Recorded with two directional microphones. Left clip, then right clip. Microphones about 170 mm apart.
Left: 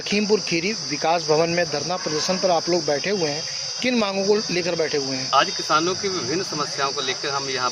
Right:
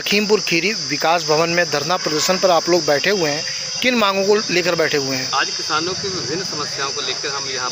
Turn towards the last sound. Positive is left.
turn(degrees=25)  # may be behind; listen again after turning